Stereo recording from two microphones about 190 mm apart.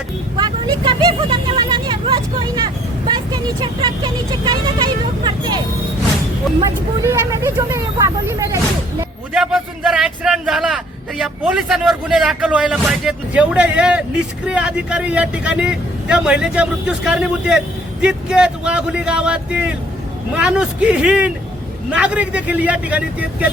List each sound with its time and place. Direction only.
0.3 s a sound: 25° right (ahead or behind)
3.1 s speech: 25° right (ahead or behind)
6.6 s speech: 15° right (ahead or behind)
9.3 s a man's voice: centre (ahead or behind)